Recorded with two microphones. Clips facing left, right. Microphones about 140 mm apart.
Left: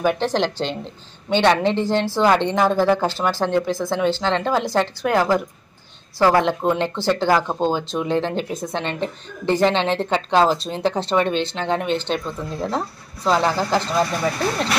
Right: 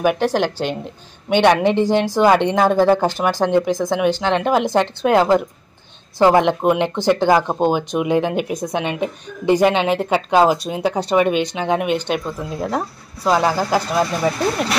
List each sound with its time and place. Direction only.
0.0 s speech: 10° right (ahead or behind)